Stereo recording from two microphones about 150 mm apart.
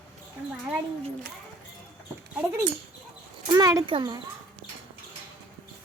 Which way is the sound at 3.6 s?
25° right (ahead or behind).